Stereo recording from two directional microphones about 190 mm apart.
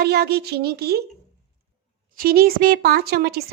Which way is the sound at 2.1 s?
50° right (ahead or behind).